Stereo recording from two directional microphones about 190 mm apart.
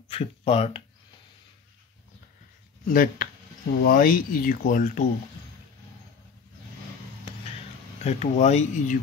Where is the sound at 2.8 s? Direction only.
45° left (ahead or behind).